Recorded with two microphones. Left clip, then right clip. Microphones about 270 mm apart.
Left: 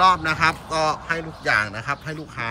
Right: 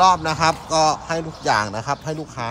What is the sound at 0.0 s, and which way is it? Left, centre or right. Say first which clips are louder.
A man's voice: right 1 dB; centre.